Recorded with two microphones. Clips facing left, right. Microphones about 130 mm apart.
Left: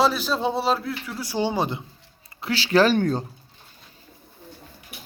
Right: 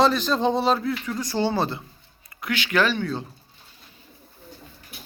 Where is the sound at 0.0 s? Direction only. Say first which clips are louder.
Right 2 dB; 5° left (ahead or behind).